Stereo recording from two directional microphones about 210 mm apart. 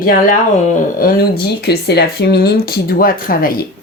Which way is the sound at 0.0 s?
40° left (ahead or behind).